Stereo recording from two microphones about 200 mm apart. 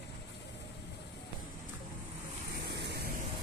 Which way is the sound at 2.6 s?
55° right (ahead or behind).